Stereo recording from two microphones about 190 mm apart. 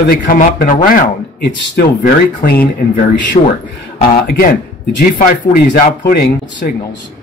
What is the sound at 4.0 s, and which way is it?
Speech, 50° left (ahead or behind).